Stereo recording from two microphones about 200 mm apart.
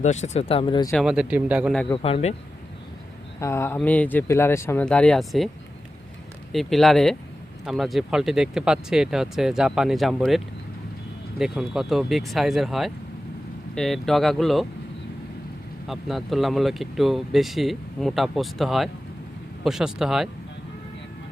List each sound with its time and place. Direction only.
0.0 s speech: 35° left (ahead or behind)
0.9 s speech: 5° right (ahead or behind)
1.9 s speech: 30° left (ahead or behind)
3.4 s speech: 15° left (ahead or behind)
6.5 s speech: centre (ahead or behind)
15.9 s speech: centre (ahead or behind)